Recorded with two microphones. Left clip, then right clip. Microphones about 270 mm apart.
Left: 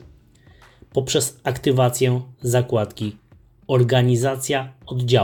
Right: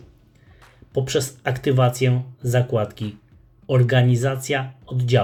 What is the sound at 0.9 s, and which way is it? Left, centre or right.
Speech, centre.